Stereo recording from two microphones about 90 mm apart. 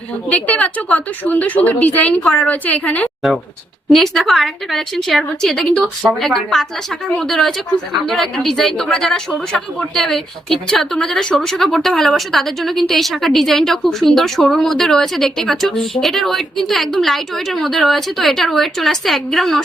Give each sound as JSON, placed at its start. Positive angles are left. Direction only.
{"t": 0.3, "sound": "a woman's voice", "side_deg": 15}
{"t": 3.9, "sound": "speech", "side_deg": 5}